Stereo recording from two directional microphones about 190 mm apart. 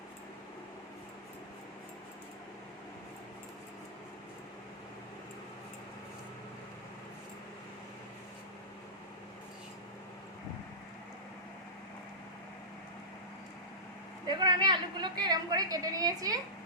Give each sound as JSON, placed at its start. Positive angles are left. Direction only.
{"t": 14.3, "sound": "a woman's voice", "side_deg": -20}